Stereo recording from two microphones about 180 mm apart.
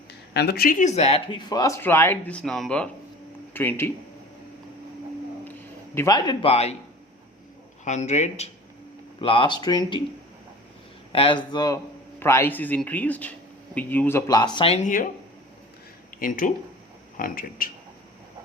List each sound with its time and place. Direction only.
0.3 s speech: 65° left (ahead or behind); by 3.9 s 10° left (ahead or behind)
5.5 s a sound: 15° left (ahead or behind)
6.5 s speech: 35° left (ahead or behind)
7.9 s speech: 40° left (ahead or behind)
9.1 s speech: 30° left (ahead or behind)
11.1 s speech: 30° left (ahead or behind)
16.2 s speech: 50° left (ahead or behind)